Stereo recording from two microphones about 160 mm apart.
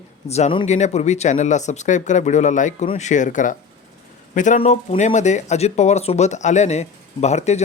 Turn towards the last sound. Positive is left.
turn(degrees=45)  # may be behind; listen again after turning